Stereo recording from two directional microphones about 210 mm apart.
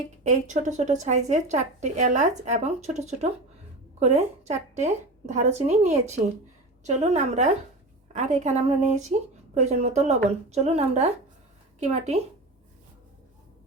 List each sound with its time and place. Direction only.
0.3 s speech: 35° right (ahead or behind)